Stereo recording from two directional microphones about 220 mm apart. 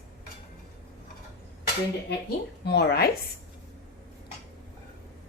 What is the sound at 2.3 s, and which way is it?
Speech, 45° left (ahead or behind).